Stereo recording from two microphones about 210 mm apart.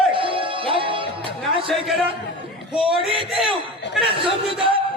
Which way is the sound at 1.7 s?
Centre (ahead or behind).